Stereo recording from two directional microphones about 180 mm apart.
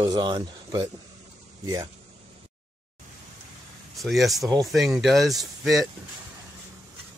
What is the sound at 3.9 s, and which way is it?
Speech, centre (ahead or behind).